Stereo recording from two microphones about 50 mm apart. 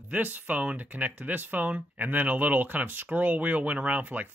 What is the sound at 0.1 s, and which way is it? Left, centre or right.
Speech, right.